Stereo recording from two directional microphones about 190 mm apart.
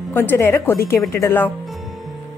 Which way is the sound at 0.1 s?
10° left (ahead or behind).